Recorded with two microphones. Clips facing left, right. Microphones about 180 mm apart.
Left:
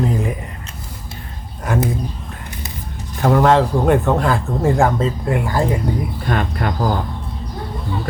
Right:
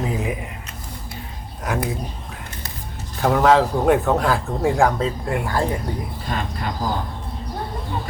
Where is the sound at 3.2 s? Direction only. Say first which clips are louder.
Left 2 dB; centre (ahead or behind).